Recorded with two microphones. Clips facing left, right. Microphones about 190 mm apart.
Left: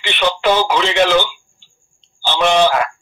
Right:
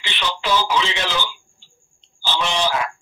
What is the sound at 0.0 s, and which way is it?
Speech, 60° left (ahead or behind).